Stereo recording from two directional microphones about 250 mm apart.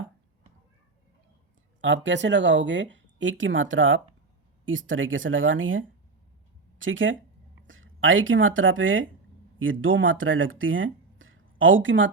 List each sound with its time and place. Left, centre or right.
1.8 s speech: right